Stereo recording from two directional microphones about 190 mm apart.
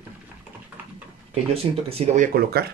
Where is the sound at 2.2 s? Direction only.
55° right (ahead or behind).